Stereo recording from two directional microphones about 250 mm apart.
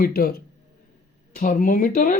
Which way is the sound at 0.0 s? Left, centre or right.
Left.